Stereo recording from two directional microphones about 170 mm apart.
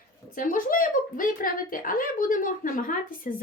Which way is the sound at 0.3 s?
55° left (ahead or behind).